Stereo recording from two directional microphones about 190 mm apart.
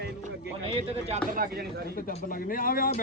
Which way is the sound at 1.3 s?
50° right (ahead or behind).